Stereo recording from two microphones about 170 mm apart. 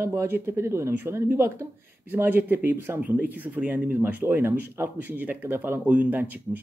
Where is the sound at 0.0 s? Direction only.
15° right (ahead or behind).